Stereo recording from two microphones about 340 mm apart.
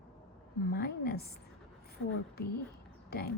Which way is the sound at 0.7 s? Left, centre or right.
Left.